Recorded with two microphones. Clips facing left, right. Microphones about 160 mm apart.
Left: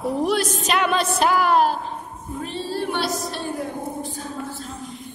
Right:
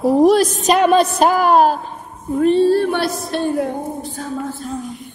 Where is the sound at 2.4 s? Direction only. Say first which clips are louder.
Right 15 dB; 55° right (ahead or behind).